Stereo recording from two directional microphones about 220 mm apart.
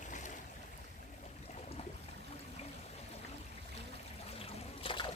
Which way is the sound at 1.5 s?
30° left (ahead or behind).